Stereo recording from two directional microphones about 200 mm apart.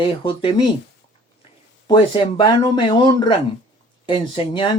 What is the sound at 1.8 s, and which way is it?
Speech, 20° left (ahead or behind).